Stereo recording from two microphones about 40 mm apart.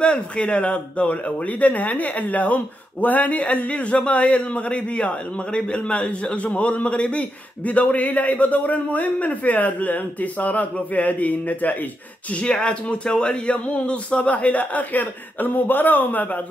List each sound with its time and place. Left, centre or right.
0.0 s speech: left
12.6 s speech: left
15.4 s a man's voice: left